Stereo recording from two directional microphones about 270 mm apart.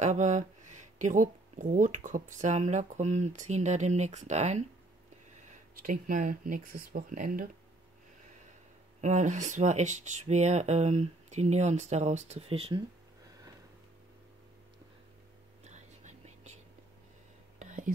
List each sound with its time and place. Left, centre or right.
0.0 s speech: right
9.0 s speech: right
15.7 s whispering: right
17.6 s whispering: right